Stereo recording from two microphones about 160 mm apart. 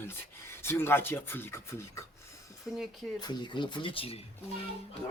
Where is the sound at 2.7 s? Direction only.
5° right (ahead or behind).